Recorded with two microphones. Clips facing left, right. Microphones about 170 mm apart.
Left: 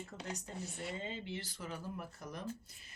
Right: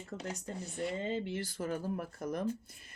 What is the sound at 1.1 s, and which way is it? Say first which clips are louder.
Speech: right 8 dB; 50° right (ahead or behind).